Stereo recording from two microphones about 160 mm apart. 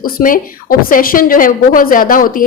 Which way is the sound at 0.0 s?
60° left (ahead or behind).